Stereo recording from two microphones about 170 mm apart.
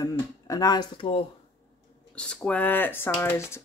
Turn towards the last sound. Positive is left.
turn(degrees=15)  # may be behind; listen again after turning